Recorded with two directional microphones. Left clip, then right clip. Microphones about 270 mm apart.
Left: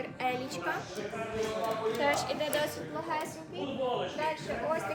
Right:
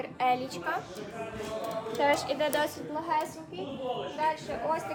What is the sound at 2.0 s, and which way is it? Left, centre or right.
A woman's voice, right.